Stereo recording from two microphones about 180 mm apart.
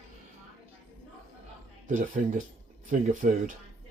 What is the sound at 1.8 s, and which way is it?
Speech, 45° right (ahead or behind).